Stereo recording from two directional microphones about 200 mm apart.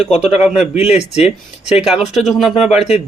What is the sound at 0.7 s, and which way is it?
Speech, 30° left (ahead or behind).